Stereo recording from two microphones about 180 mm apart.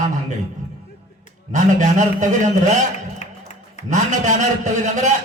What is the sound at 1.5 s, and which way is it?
A man's voice, 45° right (ahead or behind).